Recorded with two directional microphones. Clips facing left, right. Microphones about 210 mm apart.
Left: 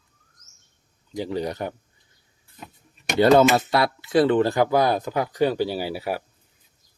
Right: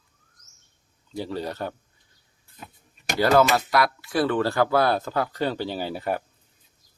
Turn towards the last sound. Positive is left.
turn(degrees=10)  # may be behind; listen again after turning